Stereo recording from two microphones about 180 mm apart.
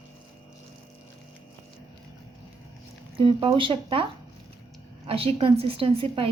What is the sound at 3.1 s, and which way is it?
A woman's voice, 30° right (ahead or behind).